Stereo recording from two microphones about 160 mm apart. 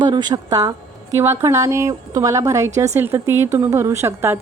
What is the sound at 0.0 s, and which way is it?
A woman's voice, 25° right (ahead or behind).